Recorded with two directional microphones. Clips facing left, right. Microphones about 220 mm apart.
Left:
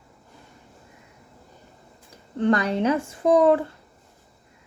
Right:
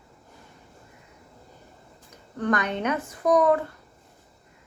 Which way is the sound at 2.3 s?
25° left (ahead or behind).